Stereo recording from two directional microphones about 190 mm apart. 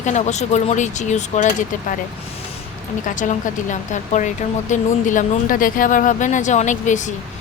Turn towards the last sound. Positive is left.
turn(degrees=40)  # may be behind; listen again after turning